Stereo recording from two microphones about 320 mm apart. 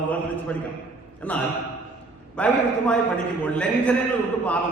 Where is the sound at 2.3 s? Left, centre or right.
Centre.